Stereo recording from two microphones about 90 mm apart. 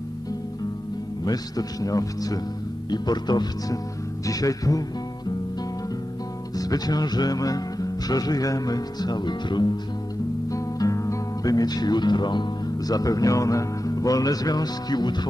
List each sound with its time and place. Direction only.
1.2 s speech: 45° left (ahead or behind)
4.3 s music: 40° left (ahead or behind)
6.5 s speech: 45° left (ahead or behind)
10.5 s speech: 40° left (ahead or behind)